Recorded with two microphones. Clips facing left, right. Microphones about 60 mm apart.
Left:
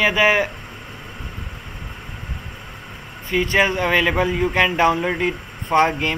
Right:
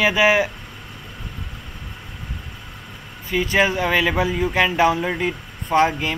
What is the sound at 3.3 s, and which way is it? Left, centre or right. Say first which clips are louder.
A man's voice: left 1 dB; centre.